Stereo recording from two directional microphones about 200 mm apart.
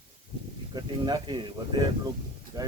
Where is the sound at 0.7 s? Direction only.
20° right (ahead or behind).